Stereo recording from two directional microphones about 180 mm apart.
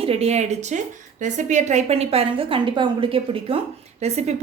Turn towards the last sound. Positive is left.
turn(degrees=-40)  # may be behind; listen again after turning